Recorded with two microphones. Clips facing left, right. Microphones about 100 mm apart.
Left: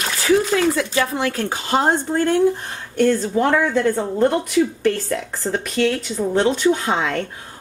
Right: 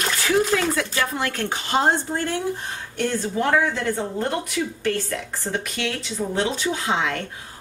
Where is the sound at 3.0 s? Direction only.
45° left (ahead or behind).